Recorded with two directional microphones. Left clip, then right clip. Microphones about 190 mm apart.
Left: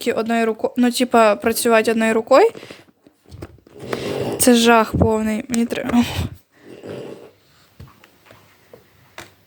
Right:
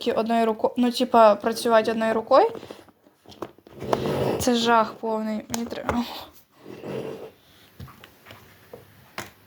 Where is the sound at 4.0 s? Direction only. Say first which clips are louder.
Left 9 dB; 90° left.